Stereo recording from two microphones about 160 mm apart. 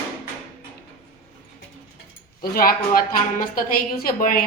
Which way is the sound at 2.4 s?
70° left (ahead or behind).